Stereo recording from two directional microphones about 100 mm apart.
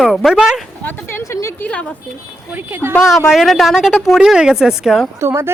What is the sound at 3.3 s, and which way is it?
Speech, centre (ahead or behind).